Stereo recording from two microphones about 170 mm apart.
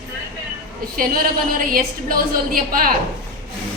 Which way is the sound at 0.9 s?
60° right (ahead or behind).